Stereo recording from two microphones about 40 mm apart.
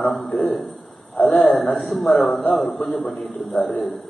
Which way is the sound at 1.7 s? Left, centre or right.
Left.